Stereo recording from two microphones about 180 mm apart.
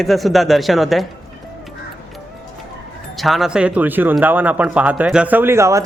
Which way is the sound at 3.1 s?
Centre (ahead or behind).